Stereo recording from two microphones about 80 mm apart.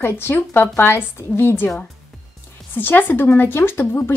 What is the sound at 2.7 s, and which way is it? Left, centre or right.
Speech, left.